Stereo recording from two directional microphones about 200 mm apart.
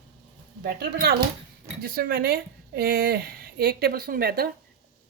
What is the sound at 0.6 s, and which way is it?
A woman's voice, 50° right (ahead or behind).